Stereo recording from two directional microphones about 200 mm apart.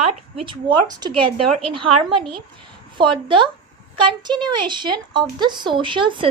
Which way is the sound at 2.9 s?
25° right (ahead or behind).